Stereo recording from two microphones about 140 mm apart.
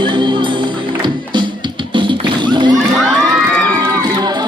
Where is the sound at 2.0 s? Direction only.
35° right (ahead or behind).